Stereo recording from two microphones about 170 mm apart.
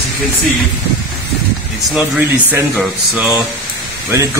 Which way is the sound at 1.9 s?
5° right (ahead or behind).